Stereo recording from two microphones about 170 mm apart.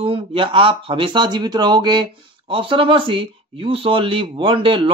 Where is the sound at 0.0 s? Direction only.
35° right (ahead or behind).